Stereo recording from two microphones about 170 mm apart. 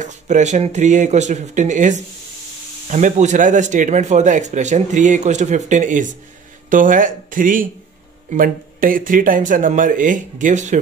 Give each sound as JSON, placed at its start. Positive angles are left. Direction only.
{"t": 0.0, "sound": "speech", "side_deg": -45}